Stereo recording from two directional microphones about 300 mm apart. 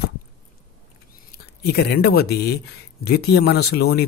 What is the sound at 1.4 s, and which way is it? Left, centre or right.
Speech, left.